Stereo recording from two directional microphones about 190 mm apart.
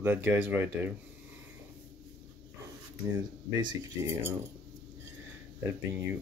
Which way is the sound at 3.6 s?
15° right (ahead or behind).